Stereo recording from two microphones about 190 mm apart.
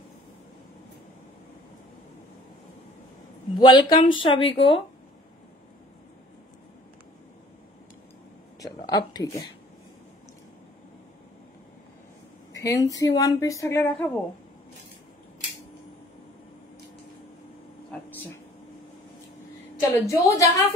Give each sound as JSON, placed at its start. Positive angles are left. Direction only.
{"t": 3.5, "sound": "speech", "side_deg": 25}
{"t": 8.5, "sound": "a sound", "side_deg": 20}
{"t": 12.5, "sound": "speech", "side_deg": 20}
{"t": 20.1, "sound": "speech", "side_deg": 15}